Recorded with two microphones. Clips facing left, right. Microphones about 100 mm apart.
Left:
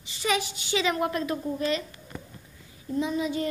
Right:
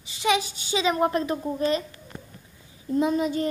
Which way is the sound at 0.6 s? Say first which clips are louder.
Right 3 dB; 20° right (ahead or behind).